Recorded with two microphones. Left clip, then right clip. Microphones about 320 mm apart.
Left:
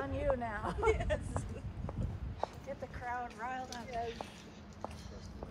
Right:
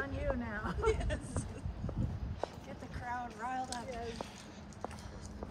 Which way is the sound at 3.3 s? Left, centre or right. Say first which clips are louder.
Right 2 dB; centre.